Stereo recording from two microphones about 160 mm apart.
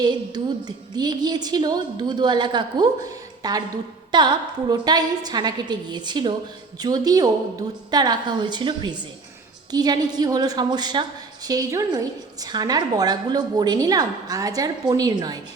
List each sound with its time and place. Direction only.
0.0 s a woman's voice: 25° right (ahead or behind)